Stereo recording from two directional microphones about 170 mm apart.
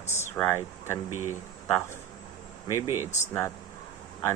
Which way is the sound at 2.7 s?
15° right (ahead or behind).